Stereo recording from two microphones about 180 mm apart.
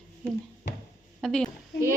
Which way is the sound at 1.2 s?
5° left (ahead or behind).